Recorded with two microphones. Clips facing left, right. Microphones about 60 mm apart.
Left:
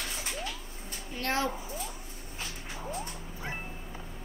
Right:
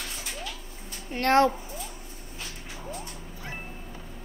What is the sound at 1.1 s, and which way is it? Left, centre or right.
Speech, right.